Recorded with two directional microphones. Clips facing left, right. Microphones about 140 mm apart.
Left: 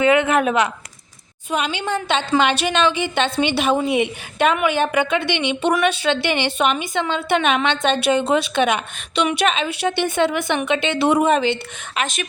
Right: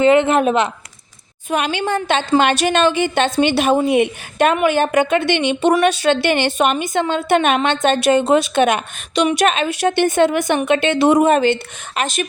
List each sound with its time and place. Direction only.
0.0 s speech: 30° right (ahead or behind)
1.5 s a woman's voice: 55° right (ahead or behind); by 12.3 s 35° right (ahead or behind)